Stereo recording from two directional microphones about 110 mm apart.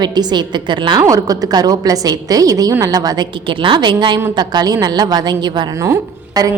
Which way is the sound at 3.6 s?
45° right (ahead or behind).